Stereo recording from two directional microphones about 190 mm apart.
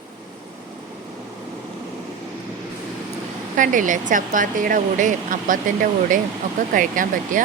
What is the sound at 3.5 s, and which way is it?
Speech, 45° right (ahead or behind).